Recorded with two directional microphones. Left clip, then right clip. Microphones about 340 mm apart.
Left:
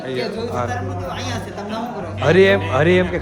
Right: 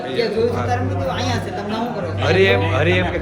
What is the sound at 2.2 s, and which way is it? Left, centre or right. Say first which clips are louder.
Speech: left 2 dB; left.